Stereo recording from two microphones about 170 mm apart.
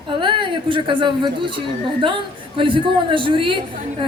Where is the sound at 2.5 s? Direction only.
30° right (ahead or behind).